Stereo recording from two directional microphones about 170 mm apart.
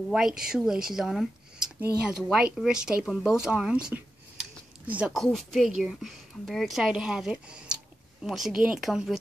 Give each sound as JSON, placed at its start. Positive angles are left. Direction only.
{"t": 0.1, "sound": "speech", "side_deg": -5}